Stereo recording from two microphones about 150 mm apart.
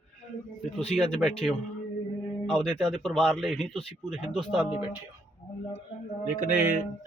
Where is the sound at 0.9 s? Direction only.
5° left (ahead or behind).